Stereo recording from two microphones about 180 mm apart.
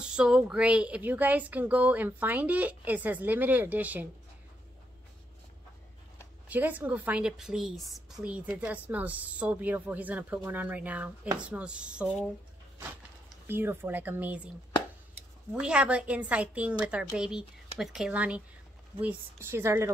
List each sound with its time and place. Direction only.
0.0 s speech: 5° right (ahead or behind)
6.5 s a woman's voice: 10° right (ahead or behind)
13.5 s speech: 10° right (ahead or behind)
15.6 s speech: 5° right (ahead or behind)